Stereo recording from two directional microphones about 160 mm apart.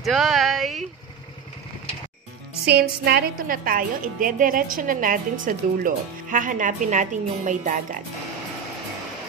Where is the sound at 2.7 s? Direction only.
90° right; by 8.0 s 55° right (ahead or behind).